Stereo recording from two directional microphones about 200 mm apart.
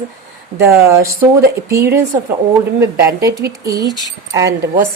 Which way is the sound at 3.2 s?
15° right (ahead or behind).